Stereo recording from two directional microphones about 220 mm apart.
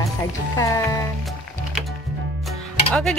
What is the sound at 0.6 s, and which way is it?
Music, 15° left (ahead or behind).